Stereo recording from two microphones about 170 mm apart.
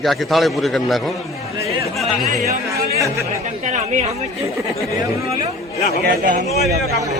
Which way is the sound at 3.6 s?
45° right (ahead or behind).